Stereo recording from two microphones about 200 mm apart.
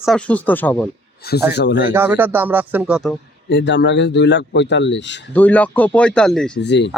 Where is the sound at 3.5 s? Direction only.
65° left (ahead or behind).